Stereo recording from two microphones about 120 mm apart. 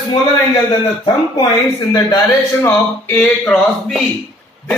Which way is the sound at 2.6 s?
15° left (ahead or behind).